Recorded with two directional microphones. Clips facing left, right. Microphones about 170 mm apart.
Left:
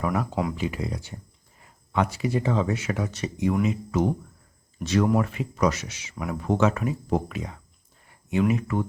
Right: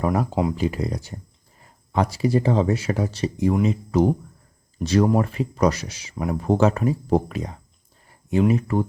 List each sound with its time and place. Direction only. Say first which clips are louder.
0.0 s speech: right 4 dB; 35° right (ahead or behind)